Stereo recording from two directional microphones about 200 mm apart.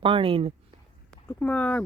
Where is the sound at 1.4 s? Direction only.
5° left (ahead or behind).